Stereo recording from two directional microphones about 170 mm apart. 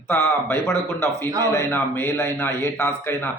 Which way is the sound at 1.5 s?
15° left (ahead or behind).